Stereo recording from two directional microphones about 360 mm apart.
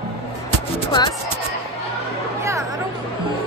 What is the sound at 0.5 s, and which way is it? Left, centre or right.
Music, centre.